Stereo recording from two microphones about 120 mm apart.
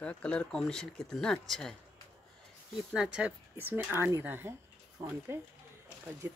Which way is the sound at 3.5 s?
20° right (ahead or behind).